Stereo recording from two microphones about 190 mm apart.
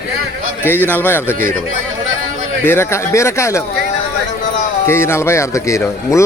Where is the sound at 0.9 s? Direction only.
10° left (ahead or behind).